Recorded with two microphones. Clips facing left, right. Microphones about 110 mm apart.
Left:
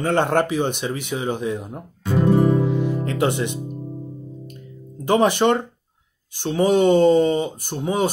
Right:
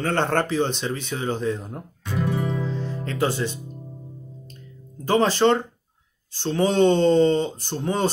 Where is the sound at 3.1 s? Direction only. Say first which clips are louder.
Left 3 dB; 20° left (ahead or behind).